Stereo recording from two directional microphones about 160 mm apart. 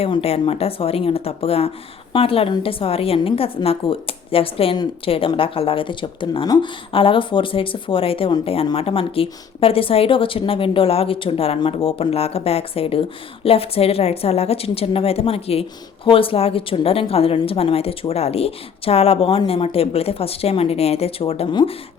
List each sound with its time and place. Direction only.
0.0 s a woman's voice: 40° left (ahead or behind)